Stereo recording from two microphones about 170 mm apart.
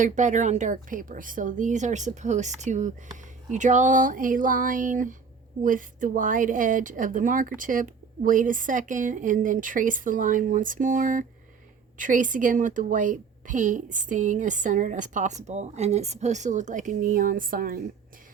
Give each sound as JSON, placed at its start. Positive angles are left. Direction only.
{"t": 0.0, "sound": "a woman's voice", "side_deg": -45}